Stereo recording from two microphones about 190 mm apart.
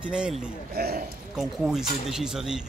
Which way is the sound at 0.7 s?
55° right (ahead or behind).